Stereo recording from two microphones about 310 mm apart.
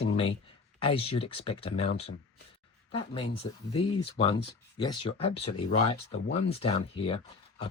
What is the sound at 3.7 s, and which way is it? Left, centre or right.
Speech, centre.